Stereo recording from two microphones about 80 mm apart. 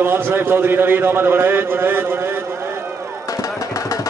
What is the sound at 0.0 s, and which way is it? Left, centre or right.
Speech, right.